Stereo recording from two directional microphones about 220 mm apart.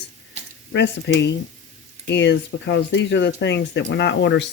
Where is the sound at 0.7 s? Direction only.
55° left (ahead or behind).